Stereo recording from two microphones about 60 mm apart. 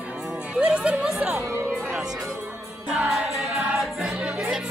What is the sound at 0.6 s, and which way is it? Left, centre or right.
Speech, centre.